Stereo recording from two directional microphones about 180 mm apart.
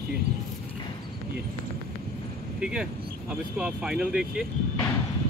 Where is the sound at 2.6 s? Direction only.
5° right (ahead or behind).